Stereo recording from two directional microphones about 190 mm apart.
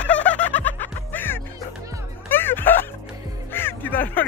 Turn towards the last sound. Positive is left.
turn(degrees=10)  # may be behind; listen again after turning